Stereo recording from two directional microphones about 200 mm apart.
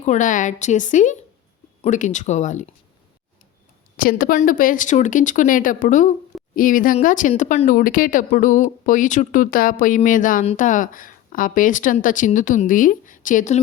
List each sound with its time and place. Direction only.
0.0 s speech: 40° left (ahead or behind)
3.9 s speech: 45° left (ahead or behind)